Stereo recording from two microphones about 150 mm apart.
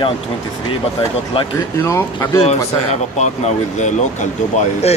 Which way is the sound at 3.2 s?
50° left (ahead or behind).